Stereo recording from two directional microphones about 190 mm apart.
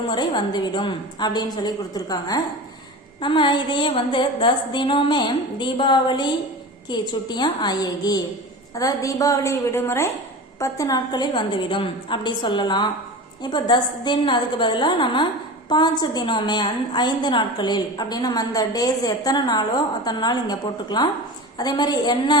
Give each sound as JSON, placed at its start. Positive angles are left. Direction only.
{"t": 0.1, "sound": "a woman's voice", "side_deg": 25}